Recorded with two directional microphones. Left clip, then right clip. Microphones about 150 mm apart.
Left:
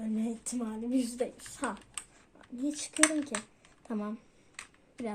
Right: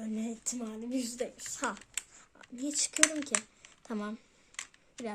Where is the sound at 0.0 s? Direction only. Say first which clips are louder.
Left 2 dB; 25° right (ahead or behind).